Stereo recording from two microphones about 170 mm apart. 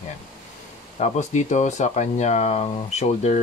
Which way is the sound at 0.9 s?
45° left (ahead or behind).